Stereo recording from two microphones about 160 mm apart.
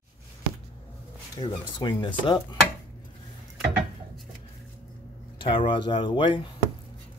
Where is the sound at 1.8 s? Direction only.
30° left (ahead or behind).